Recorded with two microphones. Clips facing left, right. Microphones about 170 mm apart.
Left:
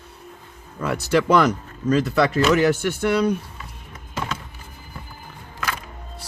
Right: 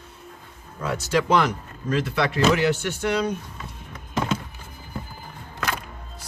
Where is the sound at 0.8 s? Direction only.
60° left (ahead or behind).